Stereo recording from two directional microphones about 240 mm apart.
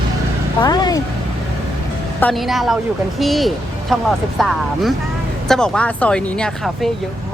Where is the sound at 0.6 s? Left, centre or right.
Centre.